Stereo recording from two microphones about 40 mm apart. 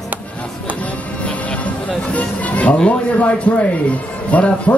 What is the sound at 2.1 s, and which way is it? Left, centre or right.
Vehicle, left.